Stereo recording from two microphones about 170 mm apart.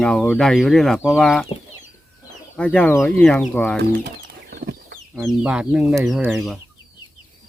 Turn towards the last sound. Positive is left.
turn(degrees=0)  # may be behind; listen again after turning